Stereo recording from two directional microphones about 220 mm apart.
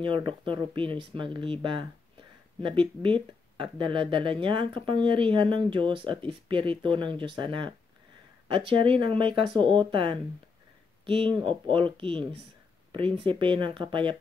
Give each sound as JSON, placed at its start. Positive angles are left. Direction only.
{"t": 0.0, "sound": "speech", "side_deg": -20}